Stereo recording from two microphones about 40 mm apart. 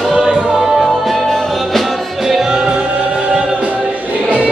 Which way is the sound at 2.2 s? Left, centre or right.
Centre.